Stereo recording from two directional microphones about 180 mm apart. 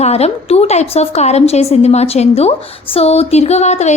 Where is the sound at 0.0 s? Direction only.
35° left (ahead or behind).